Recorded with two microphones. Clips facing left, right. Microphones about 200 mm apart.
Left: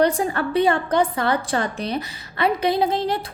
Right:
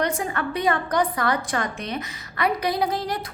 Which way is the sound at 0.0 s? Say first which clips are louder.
Left 6 dB; 35° left (ahead or behind).